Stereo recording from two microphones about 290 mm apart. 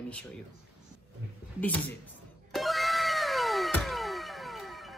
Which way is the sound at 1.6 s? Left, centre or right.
Centre.